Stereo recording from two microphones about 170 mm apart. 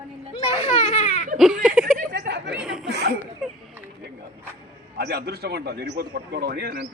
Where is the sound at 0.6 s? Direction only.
40° left (ahead or behind).